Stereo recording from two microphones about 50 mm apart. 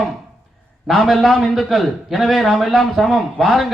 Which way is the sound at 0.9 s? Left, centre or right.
Centre.